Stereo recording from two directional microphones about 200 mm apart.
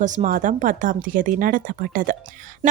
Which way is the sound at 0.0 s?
40° right (ahead or behind).